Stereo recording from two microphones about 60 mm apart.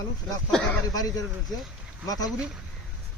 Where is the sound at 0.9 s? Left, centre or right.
Left.